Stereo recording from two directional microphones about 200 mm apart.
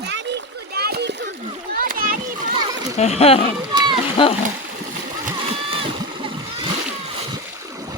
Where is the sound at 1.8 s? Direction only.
45° right (ahead or behind).